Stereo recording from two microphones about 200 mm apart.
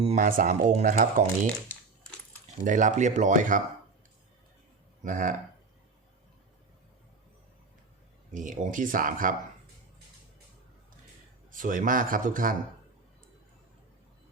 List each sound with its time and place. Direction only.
0.0 s speech: 35° right (ahead or behind)
2.6 s speech: 40° right (ahead or behind)
5.0 s speech: 40° right (ahead or behind)
8.3 s speech: 40° right (ahead or behind)
11.5 s speech: 40° right (ahead or behind)